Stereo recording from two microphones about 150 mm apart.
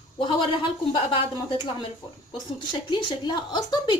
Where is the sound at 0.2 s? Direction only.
30° left (ahead or behind).